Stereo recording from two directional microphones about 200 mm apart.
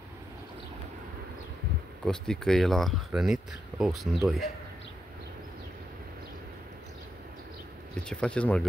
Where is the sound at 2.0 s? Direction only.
5° left (ahead or behind).